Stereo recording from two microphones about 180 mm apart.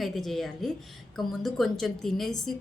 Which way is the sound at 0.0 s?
Centre (ahead or behind).